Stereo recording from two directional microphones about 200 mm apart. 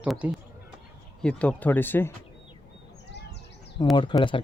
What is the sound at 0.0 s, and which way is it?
Speech, 5° right (ahead or behind).